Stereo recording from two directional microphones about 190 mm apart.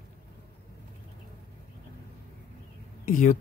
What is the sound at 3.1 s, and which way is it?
Speech, 45° left (ahead or behind).